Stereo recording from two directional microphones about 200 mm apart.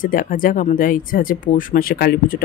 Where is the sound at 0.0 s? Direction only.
45° left (ahead or behind).